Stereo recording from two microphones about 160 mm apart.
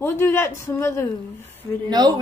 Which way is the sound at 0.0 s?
15° left (ahead or behind).